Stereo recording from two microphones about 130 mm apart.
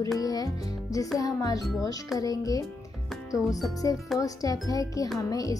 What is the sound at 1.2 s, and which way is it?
Speech, 25° left (ahead or behind).